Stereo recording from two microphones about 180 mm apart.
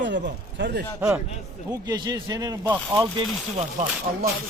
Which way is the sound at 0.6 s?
75° right (ahead or behind).